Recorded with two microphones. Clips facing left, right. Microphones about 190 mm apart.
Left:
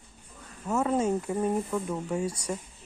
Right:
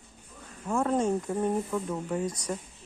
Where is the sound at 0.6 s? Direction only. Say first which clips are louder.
Even; 5° left (ahead or behind).